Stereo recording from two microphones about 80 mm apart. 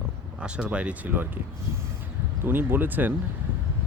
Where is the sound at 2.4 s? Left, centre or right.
Right.